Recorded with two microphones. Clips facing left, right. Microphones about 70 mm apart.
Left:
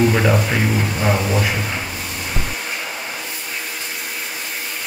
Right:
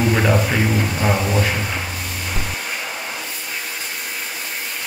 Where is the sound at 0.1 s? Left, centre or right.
Centre.